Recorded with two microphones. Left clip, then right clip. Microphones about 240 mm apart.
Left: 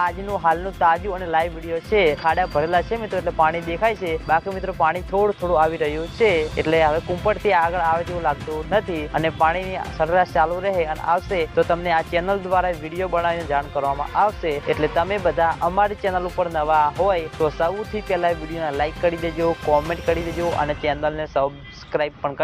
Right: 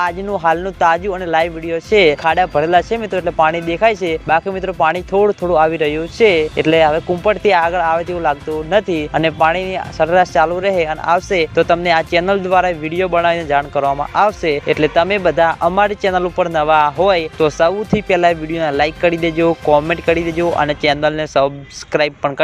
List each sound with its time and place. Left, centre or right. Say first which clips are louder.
0.0 s speech: right 4 dB; right